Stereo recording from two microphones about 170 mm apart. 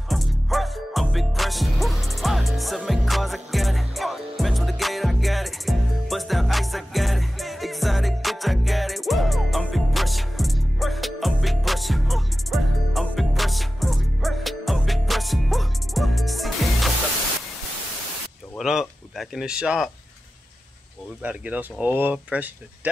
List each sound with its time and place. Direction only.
0.1 s music: centre (ahead or behind)
18.6 s a sound: 5° right (ahead or behind)
21.2 s speech: 10° right (ahead or behind)